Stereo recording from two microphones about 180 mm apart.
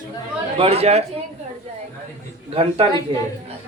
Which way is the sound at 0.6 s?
35° right (ahead or behind).